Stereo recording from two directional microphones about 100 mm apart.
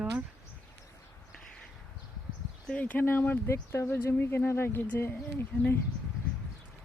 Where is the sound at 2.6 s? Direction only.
15° left (ahead or behind).